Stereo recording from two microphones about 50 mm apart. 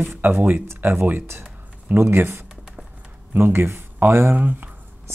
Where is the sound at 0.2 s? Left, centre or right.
Right.